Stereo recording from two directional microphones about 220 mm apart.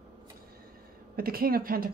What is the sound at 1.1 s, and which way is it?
Speech, 40° right (ahead or behind).